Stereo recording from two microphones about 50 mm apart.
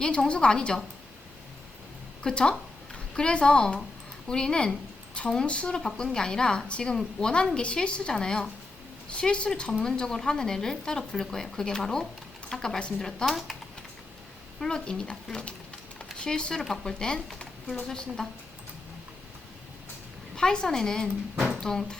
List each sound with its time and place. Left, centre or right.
0.0 s a woman's voice: left
2.2 s a woman's voice: centre
5.7 s a woman's voice: centre
14.6 s a woman's voice: centre
20.3 s a woman's voice: centre